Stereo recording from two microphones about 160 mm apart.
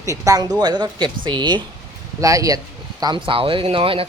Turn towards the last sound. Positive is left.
turn(degrees=-35)  # may be behind; listen again after turning